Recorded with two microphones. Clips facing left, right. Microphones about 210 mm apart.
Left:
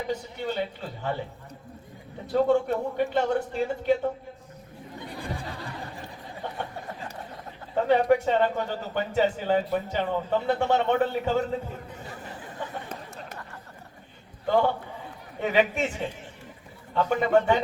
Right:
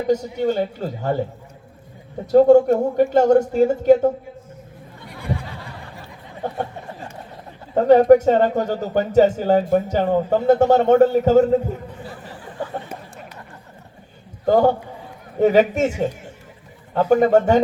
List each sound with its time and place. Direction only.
0.1 s speech: 40° right (ahead or behind)
2.2 s speech: 45° right (ahead or behind)
5.0 s a sound: 30° left (ahead or behind)
6.4 s speech: 45° right (ahead or behind)
7.8 s speech: 45° right (ahead or behind)
14.4 s speech: 40° right (ahead or behind)